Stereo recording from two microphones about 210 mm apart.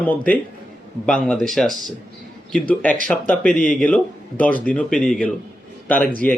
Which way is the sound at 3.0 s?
5° left (ahead or behind).